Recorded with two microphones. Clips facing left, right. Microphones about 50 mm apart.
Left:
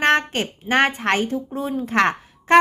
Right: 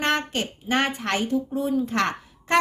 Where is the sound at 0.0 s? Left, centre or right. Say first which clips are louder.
Left 6 dB; left.